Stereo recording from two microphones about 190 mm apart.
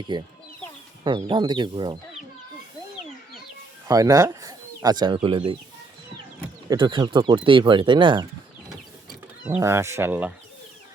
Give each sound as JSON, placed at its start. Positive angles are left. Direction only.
{"t": 0.1, "sound": "speech", "side_deg": -25}
{"t": 3.8, "sound": "speech", "side_deg": -15}
{"t": 6.7, "sound": "speech", "side_deg": -25}
{"t": 9.6, "sound": "speech", "side_deg": -15}